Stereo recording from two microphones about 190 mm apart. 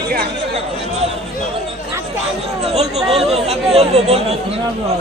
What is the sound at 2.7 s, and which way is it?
A woman's voice, 35° right (ahead or behind).